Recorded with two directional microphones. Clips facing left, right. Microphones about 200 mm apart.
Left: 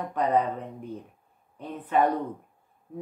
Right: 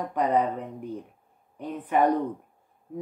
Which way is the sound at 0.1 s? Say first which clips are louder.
Even; 15° right (ahead or behind).